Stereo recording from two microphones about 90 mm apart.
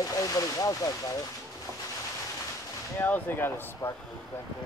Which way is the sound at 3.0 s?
20° left (ahead or behind).